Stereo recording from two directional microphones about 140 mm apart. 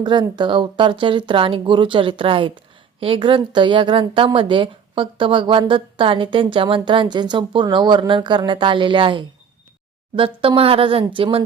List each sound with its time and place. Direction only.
0.0 s a woman's voice: 30° right (ahead or behind)